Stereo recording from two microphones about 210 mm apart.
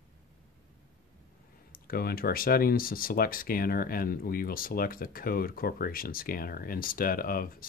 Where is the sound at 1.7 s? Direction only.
45° left (ahead or behind).